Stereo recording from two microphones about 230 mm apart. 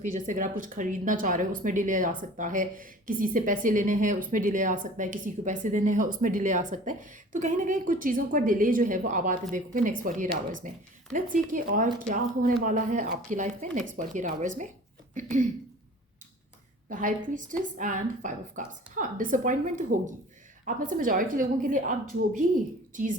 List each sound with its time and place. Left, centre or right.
0.0 s speech: right
16.9 s a woman's voice: right